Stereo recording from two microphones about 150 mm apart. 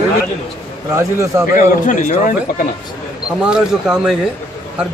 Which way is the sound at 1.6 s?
55° left (ahead or behind).